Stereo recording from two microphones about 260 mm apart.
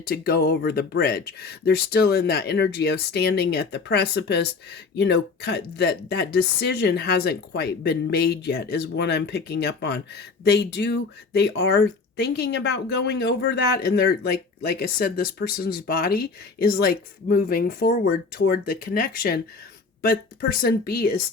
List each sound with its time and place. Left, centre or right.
0.0 s speech: left